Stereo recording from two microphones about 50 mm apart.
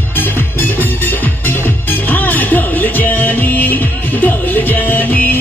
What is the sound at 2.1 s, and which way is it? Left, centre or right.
Music, left.